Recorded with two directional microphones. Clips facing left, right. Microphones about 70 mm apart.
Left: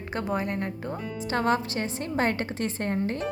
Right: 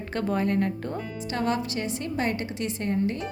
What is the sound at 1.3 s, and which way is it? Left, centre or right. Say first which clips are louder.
A woman's voice: left 2 dB; left.